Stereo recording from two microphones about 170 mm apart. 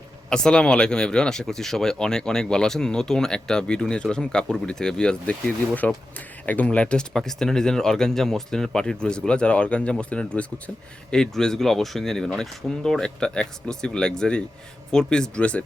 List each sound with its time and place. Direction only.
0.3 s speech: 5° left (ahead or behind)